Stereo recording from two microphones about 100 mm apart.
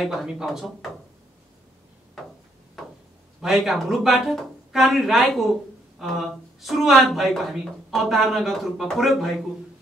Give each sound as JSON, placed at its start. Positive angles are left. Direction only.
{"t": 0.0, "sound": "speech", "side_deg": 0}
{"t": 3.3, "sound": "speech", "side_deg": 0}